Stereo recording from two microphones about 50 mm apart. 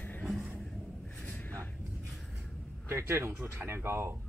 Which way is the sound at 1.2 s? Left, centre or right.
Left.